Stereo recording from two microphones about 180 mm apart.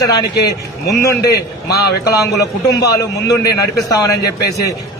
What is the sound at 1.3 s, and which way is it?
Speech, 65° left (ahead or behind).